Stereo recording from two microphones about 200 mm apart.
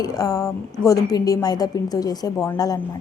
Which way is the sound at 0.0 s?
15° left (ahead or behind).